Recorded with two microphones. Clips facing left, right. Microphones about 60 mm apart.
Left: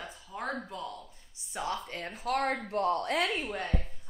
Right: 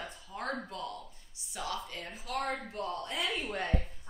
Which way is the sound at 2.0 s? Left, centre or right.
Left.